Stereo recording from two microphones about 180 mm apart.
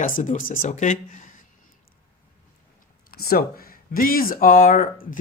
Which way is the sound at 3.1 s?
55° left (ahead or behind).